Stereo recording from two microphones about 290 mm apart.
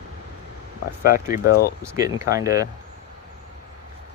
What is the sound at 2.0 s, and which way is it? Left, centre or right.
Speech, centre.